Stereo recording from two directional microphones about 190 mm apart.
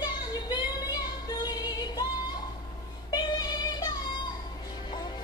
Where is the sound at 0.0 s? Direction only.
20° left (ahead or behind).